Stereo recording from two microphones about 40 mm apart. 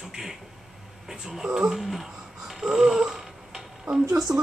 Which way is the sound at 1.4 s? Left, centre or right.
Right.